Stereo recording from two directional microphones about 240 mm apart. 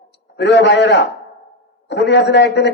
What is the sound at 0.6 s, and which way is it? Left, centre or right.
Speech, left.